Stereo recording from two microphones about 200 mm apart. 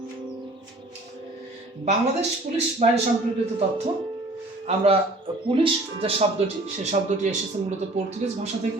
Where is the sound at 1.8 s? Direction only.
35° right (ahead or behind).